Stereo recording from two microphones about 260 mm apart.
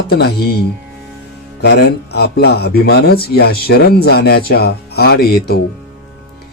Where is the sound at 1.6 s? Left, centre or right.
Left.